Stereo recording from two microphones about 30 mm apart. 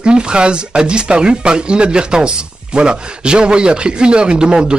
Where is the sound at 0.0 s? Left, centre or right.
Right.